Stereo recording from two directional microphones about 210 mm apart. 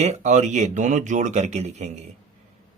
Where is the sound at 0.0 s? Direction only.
35° right (ahead or behind).